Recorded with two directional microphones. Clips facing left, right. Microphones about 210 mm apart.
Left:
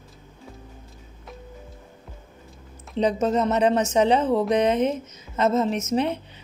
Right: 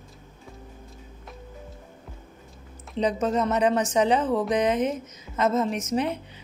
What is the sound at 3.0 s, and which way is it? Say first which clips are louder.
Speech: left 2 dB; 25° left (ahead or behind).